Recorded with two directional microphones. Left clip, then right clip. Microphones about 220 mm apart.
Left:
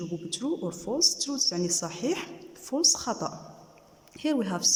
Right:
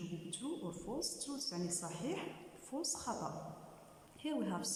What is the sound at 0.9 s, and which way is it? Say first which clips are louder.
A man's voice: left 18 dB; 55° left (ahead or behind).